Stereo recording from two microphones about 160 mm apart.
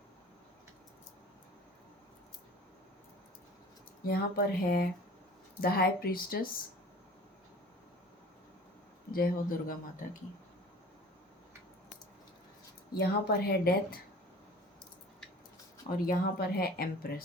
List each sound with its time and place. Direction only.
4.0 s a woman's voice: 70° left (ahead or behind)
9.1 s speech: 65° left (ahead or behind)
13.0 s a woman's voice: 75° left (ahead or behind)
16.0 s a woman's voice: 75° left (ahead or behind)